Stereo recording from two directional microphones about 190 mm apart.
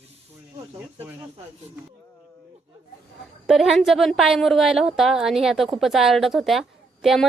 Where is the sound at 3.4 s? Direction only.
Centre (ahead or behind).